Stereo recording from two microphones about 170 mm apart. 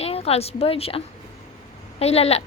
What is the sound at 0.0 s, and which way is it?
A woman's voice, 35° left (ahead or behind).